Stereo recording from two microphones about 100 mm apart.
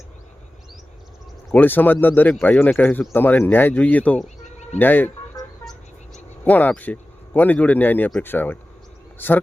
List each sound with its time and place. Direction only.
1.5 s speech: 20° left (ahead or behind)
6.4 s speech: 15° left (ahead or behind)